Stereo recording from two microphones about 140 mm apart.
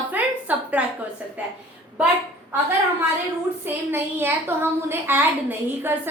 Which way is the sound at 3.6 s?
15° right (ahead or behind).